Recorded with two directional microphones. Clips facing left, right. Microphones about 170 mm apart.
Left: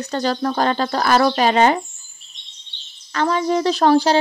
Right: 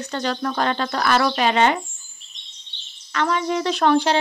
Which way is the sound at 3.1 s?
35° left (ahead or behind).